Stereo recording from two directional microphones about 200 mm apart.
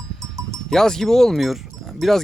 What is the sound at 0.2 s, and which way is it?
Sheep, 15° right (ahead or behind).